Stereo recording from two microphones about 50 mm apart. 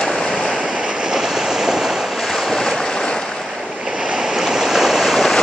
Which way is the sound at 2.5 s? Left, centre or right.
Centre.